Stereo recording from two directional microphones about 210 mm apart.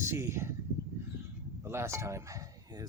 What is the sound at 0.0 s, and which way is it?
Speech, 15° right (ahead or behind).